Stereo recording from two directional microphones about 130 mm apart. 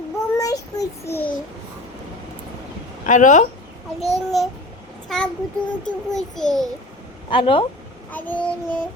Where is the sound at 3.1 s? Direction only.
75° left (ahead or behind).